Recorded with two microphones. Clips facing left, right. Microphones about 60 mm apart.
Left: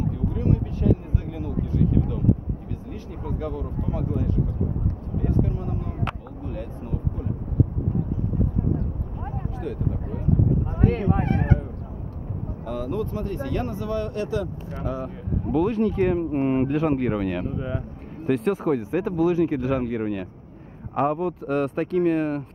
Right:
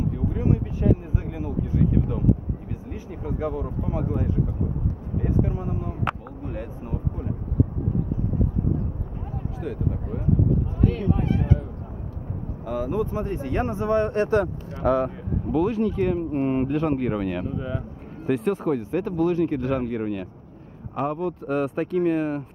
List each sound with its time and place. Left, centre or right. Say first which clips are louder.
0.3 s speech: even; centre
9.6 s speech: right 1 dB; centre
10.8 s speech: left 3 dB; left
12.6 s speech: right 2 dB; centre; by 14.5 s right
14.8 s speech: right 9 dB; right
15.5 s speech: left 1 dB; centre
16.0 s speech: left 1 dB; left; by 17.5 s centre
17.5 s speech: even; centre
18.2 s speech: left 1 dB; centre
21.0 s speech: left 3 dB; left
21.5 s speech: even; centre